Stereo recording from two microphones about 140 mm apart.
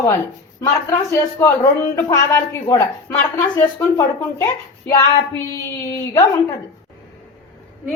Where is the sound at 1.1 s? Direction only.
20° left (ahead or behind).